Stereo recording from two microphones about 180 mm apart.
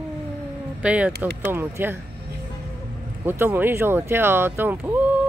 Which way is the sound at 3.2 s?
10° right (ahead or behind).